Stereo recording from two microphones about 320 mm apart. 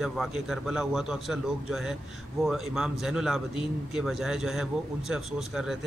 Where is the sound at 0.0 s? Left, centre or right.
Centre.